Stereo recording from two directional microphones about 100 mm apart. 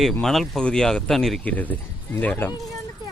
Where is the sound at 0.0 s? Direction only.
Centre (ahead or behind).